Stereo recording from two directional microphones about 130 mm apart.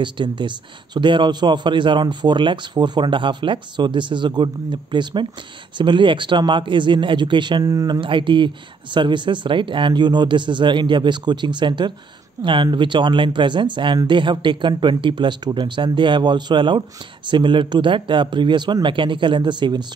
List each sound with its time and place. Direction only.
0.0 s a man's voice: 35° right (ahead or behind)